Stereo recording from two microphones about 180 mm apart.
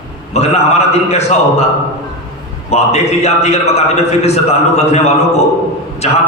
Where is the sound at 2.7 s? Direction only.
35° left (ahead or behind).